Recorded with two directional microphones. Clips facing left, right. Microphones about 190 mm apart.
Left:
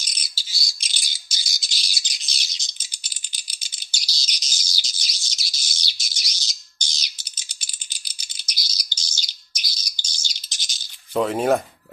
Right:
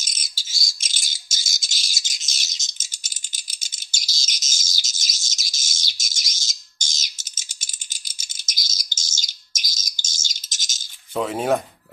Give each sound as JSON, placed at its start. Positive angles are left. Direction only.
{"t": 0.0, "sound": "bird", "side_deg": -45}
{"t": 11.1, "sound": "speech", "side_deg": 0}